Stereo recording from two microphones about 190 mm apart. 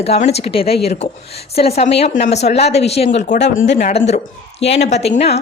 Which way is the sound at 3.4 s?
65° left (ahead or behind).